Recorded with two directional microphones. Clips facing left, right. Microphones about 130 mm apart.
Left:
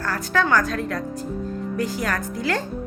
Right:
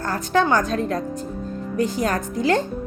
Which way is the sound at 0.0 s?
20° right (ahead or behind).